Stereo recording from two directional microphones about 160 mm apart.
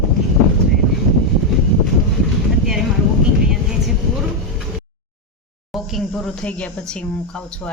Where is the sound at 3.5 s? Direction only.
5° right (ahead or behind).